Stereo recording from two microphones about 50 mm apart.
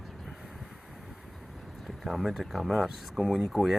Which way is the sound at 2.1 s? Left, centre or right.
Centre.